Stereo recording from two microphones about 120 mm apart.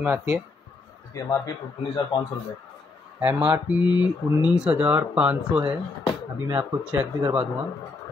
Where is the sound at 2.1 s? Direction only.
40° left (ahead or behind).